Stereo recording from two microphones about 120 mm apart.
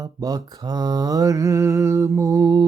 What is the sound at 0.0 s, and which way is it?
Mantra, 30° right (ahead or behind).